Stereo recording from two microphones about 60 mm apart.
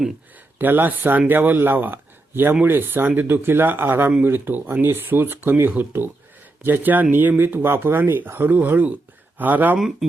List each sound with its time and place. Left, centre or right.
0.6 s speech: right
9.7 s speech: centre